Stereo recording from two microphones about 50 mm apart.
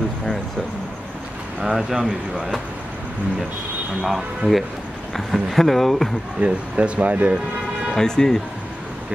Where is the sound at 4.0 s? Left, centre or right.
Centre.